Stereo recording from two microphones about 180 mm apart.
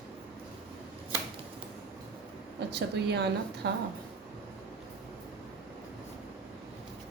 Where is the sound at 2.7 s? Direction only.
65° right (ahead or behind).